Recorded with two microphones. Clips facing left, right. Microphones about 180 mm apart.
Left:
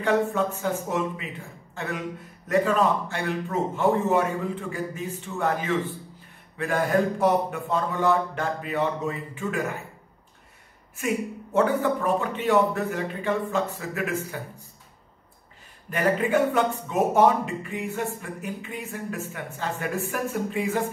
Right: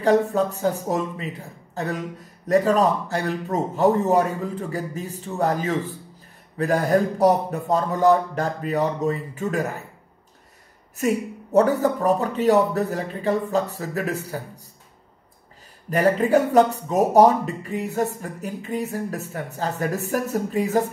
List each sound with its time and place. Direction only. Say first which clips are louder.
0.0 s a man's voice: right 4 dB; 35° right (ahead or behind)
11.0 s a man's voice: right 4 dB; 40° right (ahead or behind)
15.9 s a man's voice: right 5 dB; 35° right (ahead or behind)